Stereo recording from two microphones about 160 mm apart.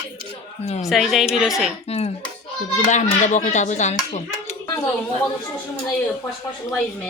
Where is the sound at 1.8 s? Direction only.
40° left (ahead or behind).